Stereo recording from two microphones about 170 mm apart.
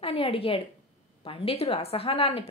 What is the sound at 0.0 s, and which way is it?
A woman's voice, 35° left (ahead or behind).